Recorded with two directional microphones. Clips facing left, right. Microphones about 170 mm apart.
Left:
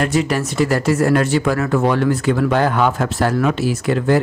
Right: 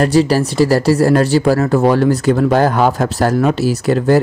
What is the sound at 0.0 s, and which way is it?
Speech, 35° right (ahead or behind).